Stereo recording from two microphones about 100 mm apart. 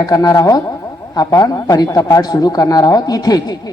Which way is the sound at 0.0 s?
35° left (ahead or behind).